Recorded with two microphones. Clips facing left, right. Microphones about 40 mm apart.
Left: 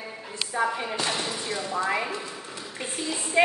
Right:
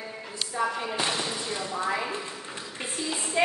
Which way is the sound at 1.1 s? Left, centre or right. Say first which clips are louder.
Left 1 dB; centre.